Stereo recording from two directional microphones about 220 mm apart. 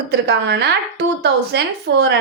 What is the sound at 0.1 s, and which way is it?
A woman's voice, 50° right (ahead or behind).